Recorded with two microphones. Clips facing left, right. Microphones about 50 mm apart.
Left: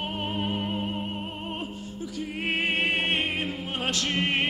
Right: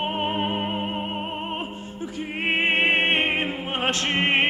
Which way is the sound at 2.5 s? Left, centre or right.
Right.